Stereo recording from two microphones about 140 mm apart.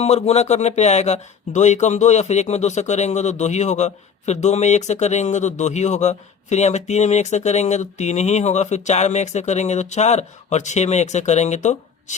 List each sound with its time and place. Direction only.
0.0 s speech: 50° left (ahead or behind)